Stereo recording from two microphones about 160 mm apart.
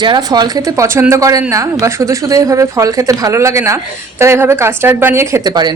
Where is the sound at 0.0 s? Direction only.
25° right (ahead or behind).